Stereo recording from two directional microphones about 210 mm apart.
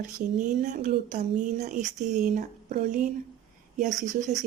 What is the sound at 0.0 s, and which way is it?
A woman's voice, 40° right (ahead or behind).